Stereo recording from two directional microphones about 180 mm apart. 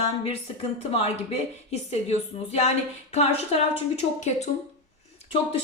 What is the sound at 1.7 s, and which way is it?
A woman's voice, 35° left (ahead or behind).